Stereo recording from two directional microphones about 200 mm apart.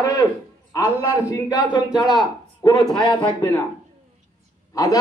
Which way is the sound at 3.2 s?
10° left (ahead or behind).